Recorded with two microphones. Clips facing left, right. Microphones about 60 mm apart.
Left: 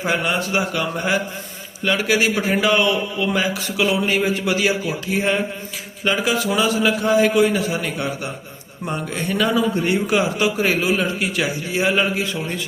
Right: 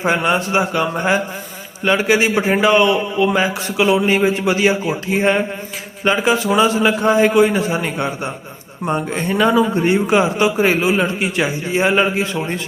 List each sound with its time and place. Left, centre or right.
0.0 s a man's voice: right
6.1 s a man's voice: right